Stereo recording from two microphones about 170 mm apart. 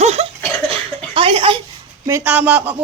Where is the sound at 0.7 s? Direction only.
30° right (ahead or behind).